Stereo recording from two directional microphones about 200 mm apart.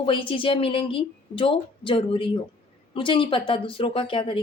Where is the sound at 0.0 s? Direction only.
25° left (ahead or behind).